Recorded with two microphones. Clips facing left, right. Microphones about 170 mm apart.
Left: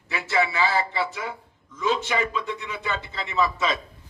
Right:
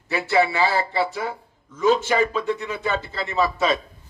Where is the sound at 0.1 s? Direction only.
35° right (ahead or behind).